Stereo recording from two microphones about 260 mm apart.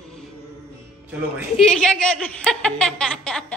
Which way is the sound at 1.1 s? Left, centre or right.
Centre.